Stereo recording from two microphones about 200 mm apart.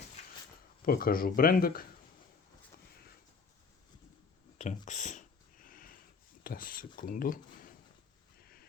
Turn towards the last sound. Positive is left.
turn(degrees=45)  # may be behind; listen again after turning